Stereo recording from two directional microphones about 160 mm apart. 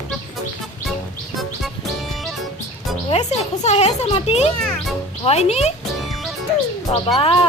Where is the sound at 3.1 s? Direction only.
45° left (ahead or behind).